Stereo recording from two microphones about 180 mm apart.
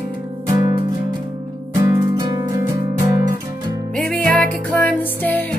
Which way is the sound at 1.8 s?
20° right (ahead or behind).